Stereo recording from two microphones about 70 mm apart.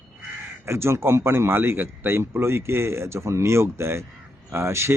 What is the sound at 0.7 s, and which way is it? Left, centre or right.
Speech, right.